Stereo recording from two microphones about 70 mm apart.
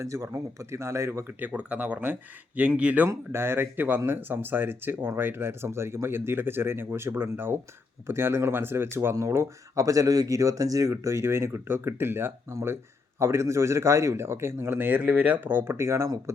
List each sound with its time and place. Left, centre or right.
0.0 s speech: right
1.4 s speech: right
3.1 s speech: right
16.0 s speech: right